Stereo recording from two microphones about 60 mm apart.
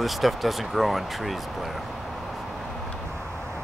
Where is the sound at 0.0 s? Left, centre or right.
Centre.